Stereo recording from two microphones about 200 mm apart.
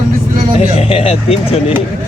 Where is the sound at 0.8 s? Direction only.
30° left (ahead or behind).